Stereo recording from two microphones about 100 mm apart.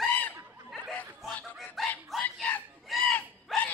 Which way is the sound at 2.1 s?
Centre (ahead or behind).